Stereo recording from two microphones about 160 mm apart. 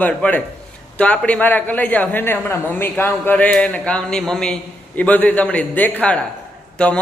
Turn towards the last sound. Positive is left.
turn(degrees=5)  # may be behind; listen again after turning